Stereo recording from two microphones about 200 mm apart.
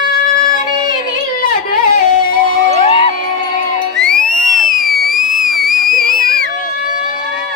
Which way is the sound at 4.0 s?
5° left (ahead or behind).